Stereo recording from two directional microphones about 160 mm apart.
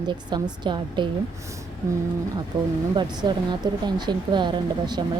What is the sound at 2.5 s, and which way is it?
Speech, 30° right (ahead or behind).